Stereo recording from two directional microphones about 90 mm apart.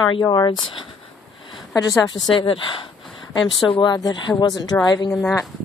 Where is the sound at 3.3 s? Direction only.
60° left (ahead or behind).